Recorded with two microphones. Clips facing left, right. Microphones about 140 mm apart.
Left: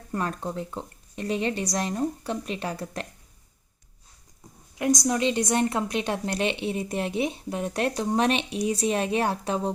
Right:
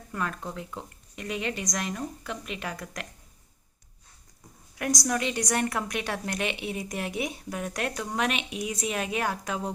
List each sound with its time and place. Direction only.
0.1 s speech: 35° left (ahead or behind)
4.7 s a woman's voice: 20° left (ahead or behind)